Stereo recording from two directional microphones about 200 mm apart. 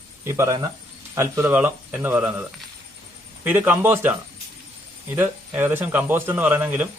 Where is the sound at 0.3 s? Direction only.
15° right (ahead or behind).